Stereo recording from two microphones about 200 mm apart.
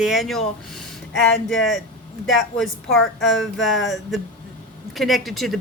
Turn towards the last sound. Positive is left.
turn(degrees=0)  # may be behind; listen again after turning